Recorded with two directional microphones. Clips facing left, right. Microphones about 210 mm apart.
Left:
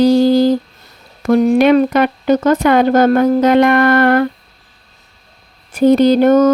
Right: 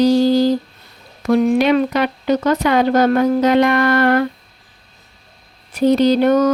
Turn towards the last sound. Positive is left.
turn(degrees=50)  # may be behind; listen again after turning